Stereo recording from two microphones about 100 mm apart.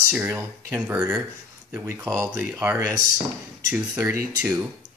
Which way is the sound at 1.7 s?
25° right (ahead or behind).